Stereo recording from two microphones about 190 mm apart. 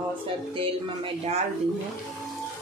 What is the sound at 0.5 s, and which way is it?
Speech, 30° right (ahead or behind).